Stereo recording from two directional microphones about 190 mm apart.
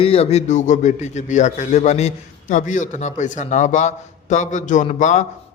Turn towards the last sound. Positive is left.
turn(degrees=40)  # may be behind; listen again after turning